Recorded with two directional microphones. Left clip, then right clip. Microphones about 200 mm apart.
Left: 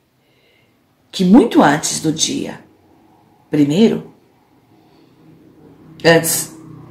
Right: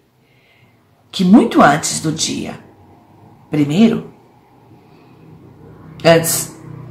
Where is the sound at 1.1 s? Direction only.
5° right (ahead or behind).